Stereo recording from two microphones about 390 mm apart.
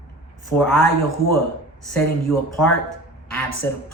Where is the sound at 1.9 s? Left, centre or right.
Centre.